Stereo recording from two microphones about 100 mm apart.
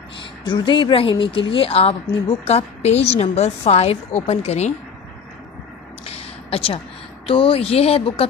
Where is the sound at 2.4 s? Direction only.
90° left.